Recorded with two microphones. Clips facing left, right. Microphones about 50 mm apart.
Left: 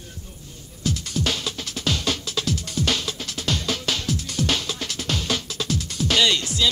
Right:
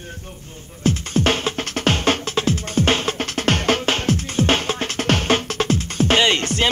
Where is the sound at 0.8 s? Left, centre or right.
Right.